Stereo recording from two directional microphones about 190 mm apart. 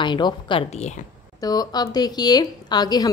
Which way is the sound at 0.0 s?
25° left (ahead or behind).